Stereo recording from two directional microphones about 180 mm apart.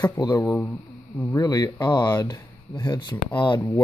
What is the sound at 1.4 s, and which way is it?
Speech, 20° left (ahead or behind).